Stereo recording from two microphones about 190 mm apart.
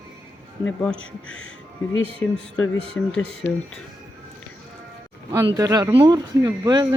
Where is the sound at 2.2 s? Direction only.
5° left (ahead or behind).